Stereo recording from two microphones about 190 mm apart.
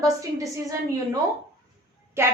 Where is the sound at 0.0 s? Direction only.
15° right (ahead or behind).